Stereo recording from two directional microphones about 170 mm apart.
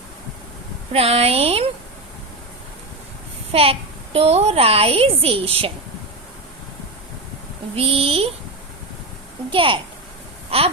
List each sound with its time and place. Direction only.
0.9 s a child's voice: 35° right (ahead or behind)
3.5 s a child's voice: 35° right (ahead or behind)
7.8 s a child's voice: 35° right (ahead or behind)
9.5 s a child's voice: 30° right (ahead or behind)